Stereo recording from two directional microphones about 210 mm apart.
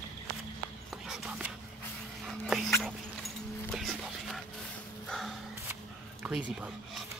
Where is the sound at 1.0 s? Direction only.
5° right (ahead or behind).